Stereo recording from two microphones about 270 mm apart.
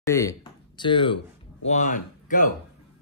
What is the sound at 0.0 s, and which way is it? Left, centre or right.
Speech, centre.